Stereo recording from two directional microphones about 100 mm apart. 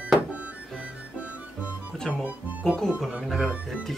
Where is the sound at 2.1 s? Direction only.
15° right (ahead or behind).